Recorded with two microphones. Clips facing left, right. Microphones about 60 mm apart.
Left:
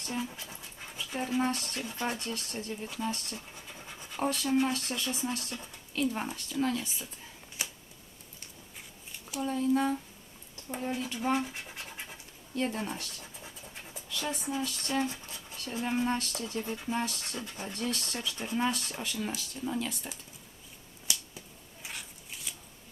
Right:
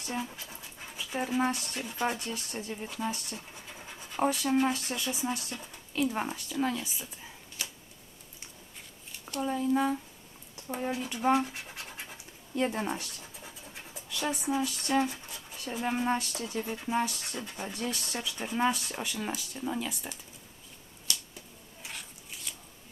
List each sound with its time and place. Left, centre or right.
0.9 s speech: centre
7.6 s a sound: left
9.4 s speech: centre
11.3 s scratch: centre
12.1 s speech: centre
13.4 s scratch: centre
15.1 s speech: centre
21.8 s a sound: centre